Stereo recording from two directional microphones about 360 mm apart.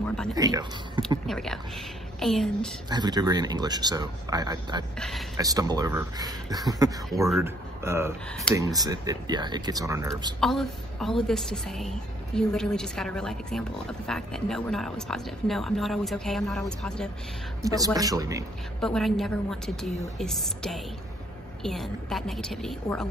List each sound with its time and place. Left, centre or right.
0.3 s speech: centre
1.2 s a woman's voice: centre
2.9 s speech: centre
4.9 s a woman's voice: centre
5.4 s a woman's voice: centre
17.6 s speech: centre
18.8 s a woman's voice: centre